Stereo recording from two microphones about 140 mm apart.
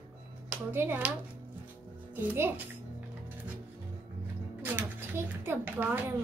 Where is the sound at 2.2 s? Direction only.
15° right (ahead or behind).